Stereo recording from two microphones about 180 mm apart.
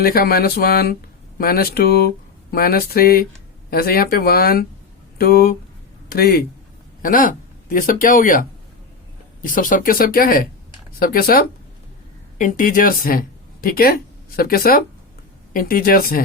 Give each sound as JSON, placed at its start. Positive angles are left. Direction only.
{"t": 0.0, "sound": "speech", "side_deg": 55}